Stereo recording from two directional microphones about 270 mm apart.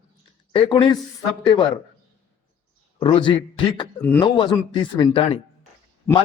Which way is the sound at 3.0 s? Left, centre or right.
Centre.